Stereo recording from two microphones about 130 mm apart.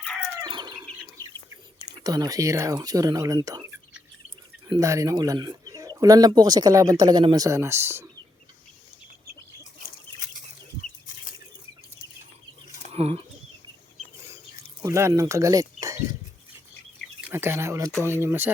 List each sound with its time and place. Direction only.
0.4 s chicken: 35° right (ahead or behind)
2.0 s speech: 30° right (ahead or behind)
4.8 s speech: 25° right (ahead or behind)
11.0 s a sound: 90° left
12.9 s speech: 50° right (ahead or behind)
14.8 s speech: 25° right (ahead or behind)
17.2 s speech: 15° right (ahead or behind)